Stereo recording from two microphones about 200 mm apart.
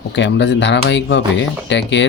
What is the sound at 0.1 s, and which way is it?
Speech, 60° left (ahead or behind).